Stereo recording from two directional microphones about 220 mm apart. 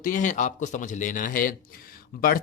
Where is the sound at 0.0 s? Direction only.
35° left (ahead or behind).